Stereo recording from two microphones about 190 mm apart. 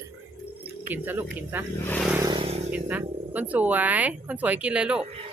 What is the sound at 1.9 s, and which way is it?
Speech, centre (ahead or behind).